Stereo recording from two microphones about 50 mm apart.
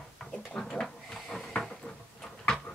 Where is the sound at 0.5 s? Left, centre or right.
Centre.